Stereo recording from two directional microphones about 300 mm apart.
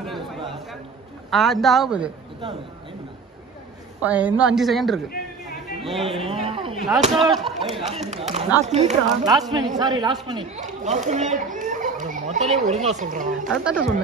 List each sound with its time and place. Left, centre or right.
0.0 s chatter: centre
1.3 s a woman's voice: centre
4.0 s a woman's voice: centre
6.4 s a sound: centre
6.7 s a woman's voice: centre
7.7 s a woman's voice: right
13.5 s a woman's voice: centre